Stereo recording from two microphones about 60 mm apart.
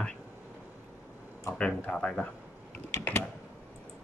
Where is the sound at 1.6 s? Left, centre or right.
Centre.